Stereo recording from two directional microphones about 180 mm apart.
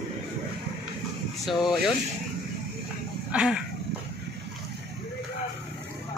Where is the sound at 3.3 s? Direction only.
5° right (ahead or behind).